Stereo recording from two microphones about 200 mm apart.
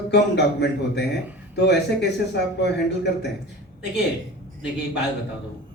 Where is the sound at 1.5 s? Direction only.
60° left (ahead or behind).